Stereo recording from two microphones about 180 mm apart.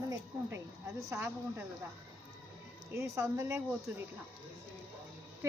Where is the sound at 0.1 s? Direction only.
15° right (ahead or behind).